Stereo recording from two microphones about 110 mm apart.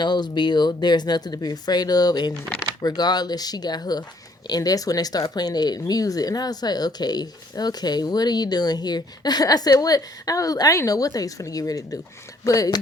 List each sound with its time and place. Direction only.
0.0 s speech: 40° left (ahead or behind)